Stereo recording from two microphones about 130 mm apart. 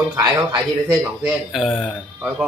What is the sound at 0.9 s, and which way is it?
A man's voice, 10° right (ahead or behind).